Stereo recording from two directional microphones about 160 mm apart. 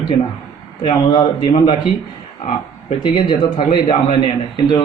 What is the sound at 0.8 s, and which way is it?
Speech, 30° left (ahead or behind).